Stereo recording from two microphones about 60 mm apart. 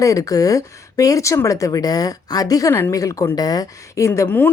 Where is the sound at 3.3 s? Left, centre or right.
Left.